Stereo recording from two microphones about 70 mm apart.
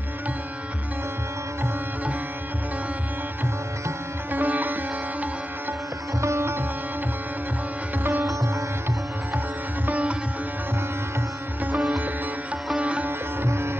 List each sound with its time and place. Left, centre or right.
4.3 s sitar: right
6.2 s sitar: right
8.2 s sitar: right
9.8 s music: right
12.7 s sitar: centre
13.4 s music: right